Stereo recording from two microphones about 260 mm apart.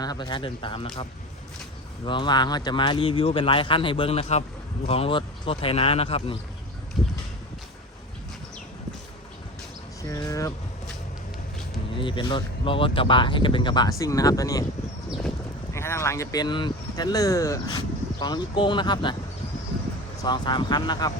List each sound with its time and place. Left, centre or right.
0.0 s speech: centre
2.0 s speech: centre
7.0 s a sound: centre
10.0 s vehicle: centre
11.9 s speech: centre
15.7 s speech: centre
20.2 s speech: centre